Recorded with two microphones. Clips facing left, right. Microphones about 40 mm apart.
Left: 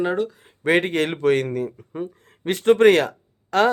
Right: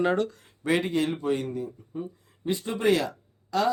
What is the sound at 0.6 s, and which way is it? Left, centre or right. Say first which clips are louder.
Speech: left 5 dB; left.